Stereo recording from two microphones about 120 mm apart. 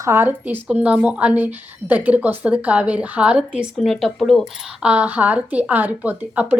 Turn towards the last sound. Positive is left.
turn(degrees=-10)  # may be behind; listen again after turning